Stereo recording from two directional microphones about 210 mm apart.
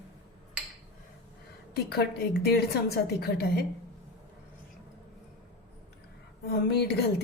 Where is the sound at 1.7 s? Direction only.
50° left (ahead or behind).